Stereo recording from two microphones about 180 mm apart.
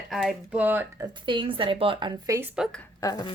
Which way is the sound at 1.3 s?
30° right (ahead or behind).